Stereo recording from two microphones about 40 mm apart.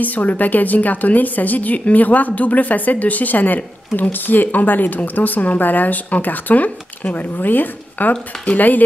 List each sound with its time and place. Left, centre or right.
0.0 s a woman's voice: left
8.1 s a woman's voice: left